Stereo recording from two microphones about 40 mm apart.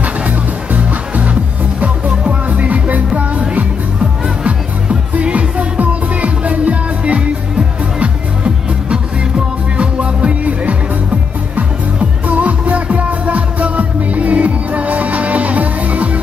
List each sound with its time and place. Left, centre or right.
0.0 s music: right